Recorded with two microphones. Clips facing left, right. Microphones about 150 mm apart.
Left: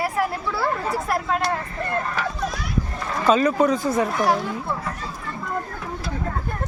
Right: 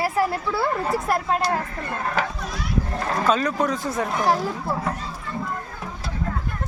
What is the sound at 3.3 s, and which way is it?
Speech, centre (ahead or behind).